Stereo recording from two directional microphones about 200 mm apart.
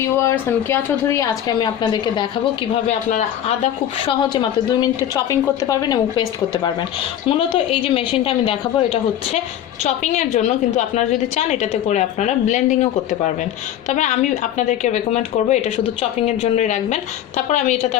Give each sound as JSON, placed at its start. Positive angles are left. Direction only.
{"t": 0.0, "sound": "a woman's voice", "side_deg": 15}
{"t": 3.1, "sound": "a woman's voice", "side_deg": 35}
{"t": 4.0, "sound": "a woman's voice", "side_deg": 20}